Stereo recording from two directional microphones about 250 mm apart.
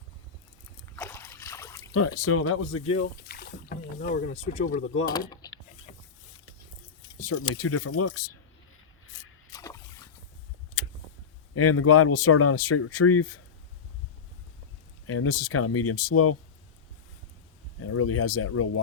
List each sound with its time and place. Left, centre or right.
0.9 s trickle: centre
1.9 s speech: left
3.2 s rowboat: left
4.3 s speech: left
5.0 s power windows: centre
7.2 s speech: left
9.5 s a sound: centre
11.5 s speech: left
15.0 s speech: left
17.9 s speech: left